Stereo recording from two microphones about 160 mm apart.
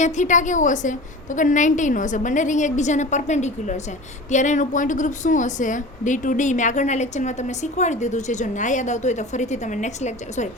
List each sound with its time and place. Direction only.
0.0 s a woman's voice: 50° left (ahead or behind)